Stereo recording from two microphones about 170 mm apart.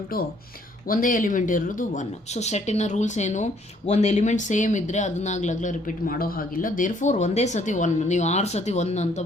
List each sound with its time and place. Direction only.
0.9 s speech: 55° left (ahead or behind)